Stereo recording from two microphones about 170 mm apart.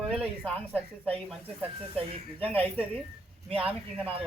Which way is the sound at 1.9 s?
35° right (ahead or behind).